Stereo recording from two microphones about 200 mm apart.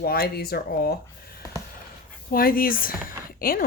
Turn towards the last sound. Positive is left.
turn(degrees=45)  # may be behind; listen again after turning